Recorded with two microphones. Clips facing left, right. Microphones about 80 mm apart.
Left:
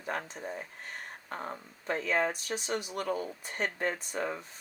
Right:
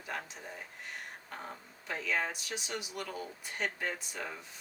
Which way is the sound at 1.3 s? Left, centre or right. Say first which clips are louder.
Left 8 dB; left.